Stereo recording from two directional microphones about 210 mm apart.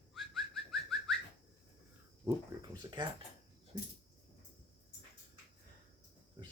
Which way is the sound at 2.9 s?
20° right (ahead or behind).